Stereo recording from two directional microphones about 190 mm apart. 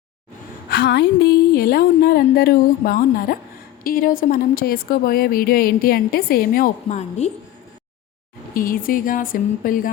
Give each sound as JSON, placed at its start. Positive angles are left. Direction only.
{"t": 0.7, "sound": "a woman's voice", "side_deg": 60}
{"t": 8.5, "sound": "a woman's voice", "side_deg": 45}